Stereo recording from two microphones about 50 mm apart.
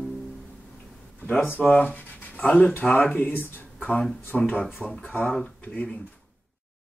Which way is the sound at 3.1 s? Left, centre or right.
Left.